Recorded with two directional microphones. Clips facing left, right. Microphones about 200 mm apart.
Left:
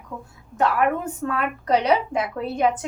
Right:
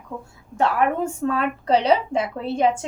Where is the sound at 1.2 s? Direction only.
30° right (ahead or behind).